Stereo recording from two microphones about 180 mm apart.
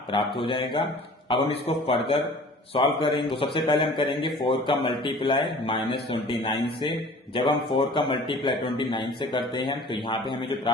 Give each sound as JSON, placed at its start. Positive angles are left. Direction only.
{"t": 0.4, "sound": "a man's voice", "side_deg": 25}